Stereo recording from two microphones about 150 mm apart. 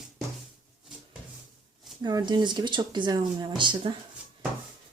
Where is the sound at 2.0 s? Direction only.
30° right (ahead or behind).